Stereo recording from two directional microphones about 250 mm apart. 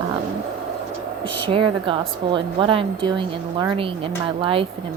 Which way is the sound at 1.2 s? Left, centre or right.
Centre.